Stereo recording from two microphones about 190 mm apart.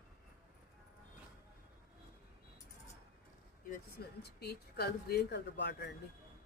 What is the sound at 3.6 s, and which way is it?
Speech, 55° left (ahead or behind).